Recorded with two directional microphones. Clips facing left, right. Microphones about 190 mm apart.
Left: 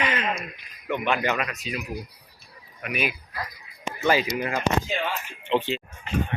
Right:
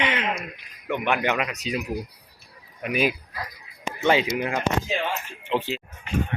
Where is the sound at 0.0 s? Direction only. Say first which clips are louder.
Right 1 dB; 90° right.